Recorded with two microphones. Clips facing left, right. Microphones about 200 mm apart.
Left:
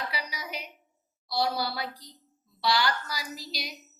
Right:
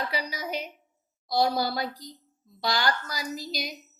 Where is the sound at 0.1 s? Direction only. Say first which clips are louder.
Right 6 dB; 45° right (ahead or behind).